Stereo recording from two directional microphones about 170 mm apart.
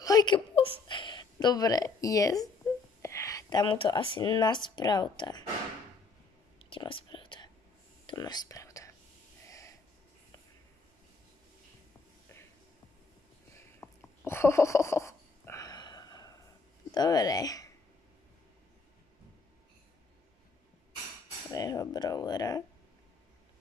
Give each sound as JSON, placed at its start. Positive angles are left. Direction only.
{"t": 0.0, "sound": "whimper", "side_deg": 25}
{"t": 0.8, "sound": "a sound", "side_deg": 30}
{"t": 3.0, "sound": "speech", "side_deg": 15}
{"t": 6.6, "sound": "whispering", "side_deg": 30}
{"t": 9.5, "sound": "snort", "side_deg": 20}
{"t": 13.7, "sound": "a sound", "side_deg": 15}
{"t": 16.9, "sound": "speech", "side_deg": 25}
{"t": 21.5, "sound": "speech", "side_deg": 20}